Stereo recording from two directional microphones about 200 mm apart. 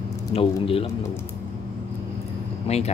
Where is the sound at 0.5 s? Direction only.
30° left (ahead or behind).